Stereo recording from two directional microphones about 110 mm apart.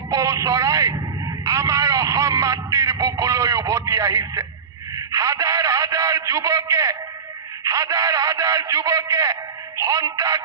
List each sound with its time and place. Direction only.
0.1 s vehicle: 30° right (ahead or behind)
1.5 s a sound: 30° right (ahead or behind)
4.9 s a man's voice: 30° right (ahead or behind)